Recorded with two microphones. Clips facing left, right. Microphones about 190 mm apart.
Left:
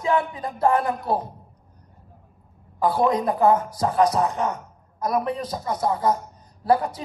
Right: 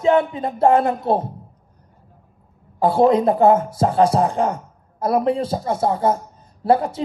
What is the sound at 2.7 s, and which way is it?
Speech, 25° right (ahead or behind).